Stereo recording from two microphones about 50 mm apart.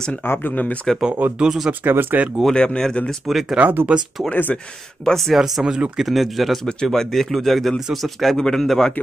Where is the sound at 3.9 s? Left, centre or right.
Right.